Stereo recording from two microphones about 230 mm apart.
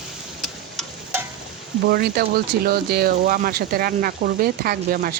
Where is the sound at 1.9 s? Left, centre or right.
Right.